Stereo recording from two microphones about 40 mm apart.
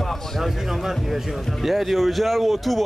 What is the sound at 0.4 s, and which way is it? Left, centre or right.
Speech, centre.